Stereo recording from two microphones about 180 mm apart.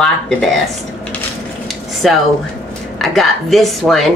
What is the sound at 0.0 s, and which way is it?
Speech, centre (ahead or behind).